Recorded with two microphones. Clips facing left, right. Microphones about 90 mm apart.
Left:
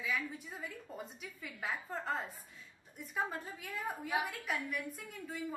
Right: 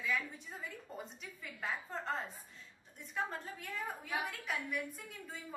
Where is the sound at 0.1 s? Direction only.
Centre (ahead or behind).